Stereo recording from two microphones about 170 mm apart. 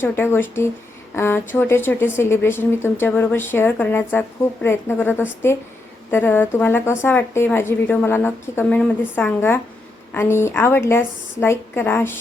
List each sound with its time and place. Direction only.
0.0 s a woman's voice: 10° left (ahead or behind)